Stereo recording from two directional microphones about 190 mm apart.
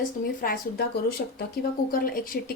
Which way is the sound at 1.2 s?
60° left (ahead or behind).